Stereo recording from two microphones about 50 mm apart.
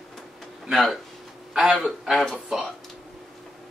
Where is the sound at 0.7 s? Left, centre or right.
Centre.